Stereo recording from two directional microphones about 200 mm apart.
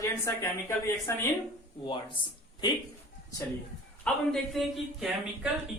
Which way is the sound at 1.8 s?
25° left (ahead or behind).